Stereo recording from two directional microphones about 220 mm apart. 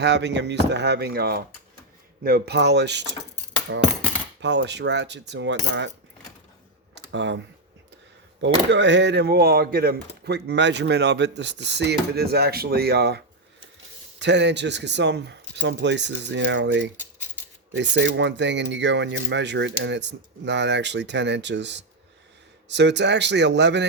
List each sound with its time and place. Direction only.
0.0 s speech: 50° right (ahead or behind)
6.9 s computer keyboard: 55° right (ahead or behind)
8.7 s speech: 55° right (ahead or behind)